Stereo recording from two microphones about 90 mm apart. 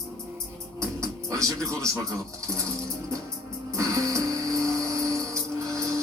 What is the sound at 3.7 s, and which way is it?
Music, 35° right (ahead or behind).